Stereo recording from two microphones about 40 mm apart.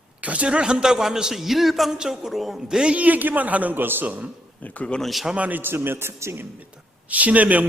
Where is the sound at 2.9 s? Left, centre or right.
Right.